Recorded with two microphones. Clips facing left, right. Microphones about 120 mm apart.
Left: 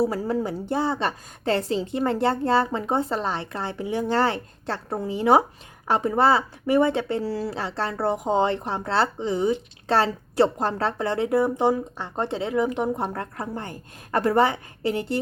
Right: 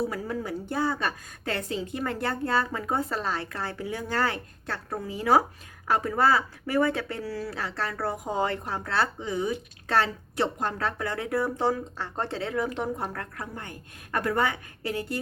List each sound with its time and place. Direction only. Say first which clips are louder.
0.0 s speech: left 7 dB; 30° left (ahead or behind)